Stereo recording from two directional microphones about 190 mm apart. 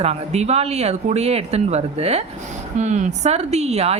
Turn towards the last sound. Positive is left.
turn(degrees=-35)  # may be behind; listen again after turning